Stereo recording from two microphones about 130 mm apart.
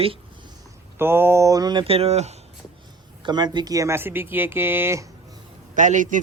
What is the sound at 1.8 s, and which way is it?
Speech, 50° right (ahead or behind).